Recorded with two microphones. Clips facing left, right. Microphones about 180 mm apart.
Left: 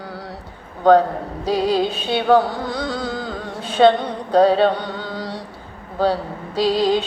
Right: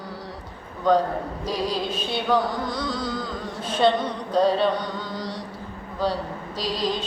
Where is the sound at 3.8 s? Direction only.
75° left (ahead or behind).